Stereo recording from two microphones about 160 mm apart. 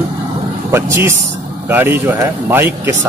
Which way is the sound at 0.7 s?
15° right (ahead or behind).